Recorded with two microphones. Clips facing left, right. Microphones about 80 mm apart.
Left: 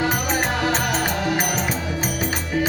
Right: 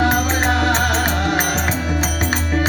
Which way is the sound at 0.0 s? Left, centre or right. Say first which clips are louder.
Right 4 dB; right.